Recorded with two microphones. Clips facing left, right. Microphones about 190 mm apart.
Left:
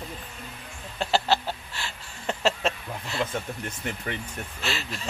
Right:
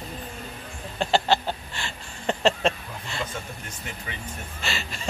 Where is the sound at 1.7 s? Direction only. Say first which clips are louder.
Right 2 dB; 5° left (ahead or behind).